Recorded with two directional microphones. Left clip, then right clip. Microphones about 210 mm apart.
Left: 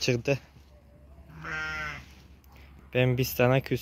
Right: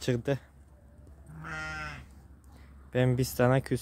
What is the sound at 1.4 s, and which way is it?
Sheep, 60° right (ahead or behind).